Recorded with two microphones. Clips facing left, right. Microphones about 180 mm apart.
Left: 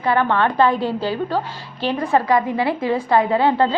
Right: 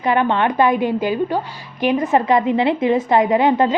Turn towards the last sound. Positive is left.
turn(degrees=-20)  # may be behind; listen again after turning